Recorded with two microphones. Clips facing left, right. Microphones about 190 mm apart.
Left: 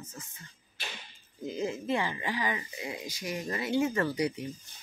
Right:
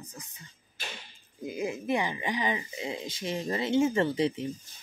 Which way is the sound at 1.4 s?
15° right (ahead or behind).